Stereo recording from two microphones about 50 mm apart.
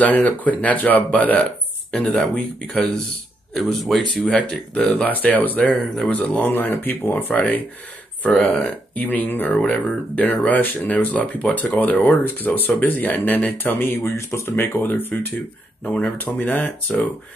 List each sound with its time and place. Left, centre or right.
0.0 s speech: left
1.9 s speech: centre
3.5 s speech: centre
4.4 s speech: left
5.0 s speech: left
7.3 s speech: left
8.5 s speech: centre
8.9 s speech: left
9.5 s speech: left
14.0 s speech: left
14.7 s speech: left
15.8 s speech: left
16.9 s speech: centre